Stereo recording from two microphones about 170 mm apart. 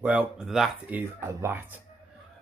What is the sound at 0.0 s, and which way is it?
Speech, 10° right (ahead or behind).